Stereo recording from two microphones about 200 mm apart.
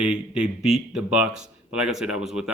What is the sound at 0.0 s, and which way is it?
Speech, 5° right (ahead or behind).